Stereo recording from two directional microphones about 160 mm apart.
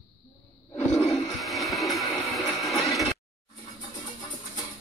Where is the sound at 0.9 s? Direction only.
5° left (ahead or behind).